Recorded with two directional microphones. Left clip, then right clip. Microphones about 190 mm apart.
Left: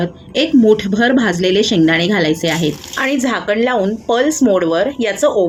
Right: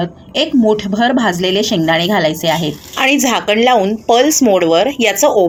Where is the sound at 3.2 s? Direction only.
15° right (ahead or behind).